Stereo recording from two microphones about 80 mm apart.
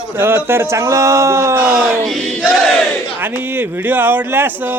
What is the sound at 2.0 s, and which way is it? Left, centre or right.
Crowd, centre.